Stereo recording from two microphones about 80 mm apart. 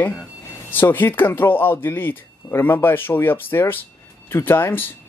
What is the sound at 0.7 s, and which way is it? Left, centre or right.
Speech, left.